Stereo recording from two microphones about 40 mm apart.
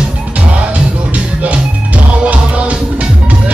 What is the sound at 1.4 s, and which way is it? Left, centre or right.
Music, right.